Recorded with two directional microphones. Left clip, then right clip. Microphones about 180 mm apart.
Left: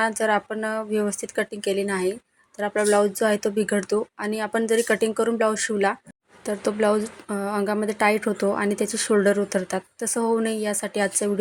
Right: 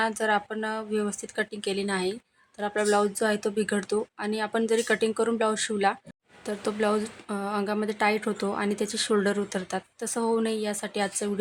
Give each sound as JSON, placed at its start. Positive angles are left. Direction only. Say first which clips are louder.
{"t": 0.0, "sound": "speech", "louder": "left 4 dB", "side_deg": 15}